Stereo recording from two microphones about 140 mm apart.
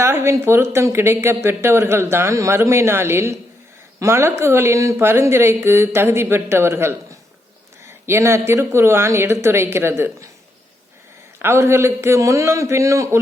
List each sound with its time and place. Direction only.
0.0 s a woman's voice: 15° right (ahead or behind)
11.3 s a woman's voice: 20° right (ahead or behind)